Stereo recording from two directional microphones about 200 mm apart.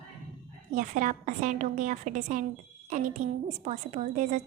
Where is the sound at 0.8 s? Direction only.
40° right (ahead or behind).